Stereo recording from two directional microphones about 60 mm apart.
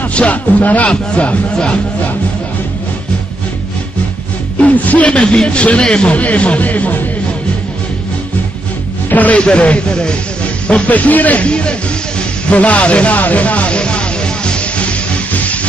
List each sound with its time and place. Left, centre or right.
0.1 s speech: left
4.6 s speech: left
5.2 s speech: centre
9.1 s a man's voice: left
10.9 s speech: left
12.2 s music: left